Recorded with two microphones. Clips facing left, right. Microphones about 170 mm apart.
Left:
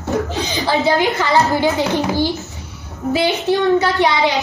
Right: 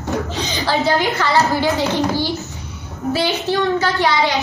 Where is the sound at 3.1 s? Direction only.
20° left (ahead or behind).